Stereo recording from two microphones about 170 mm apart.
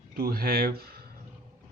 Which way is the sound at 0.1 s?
65° right (ahead or behind).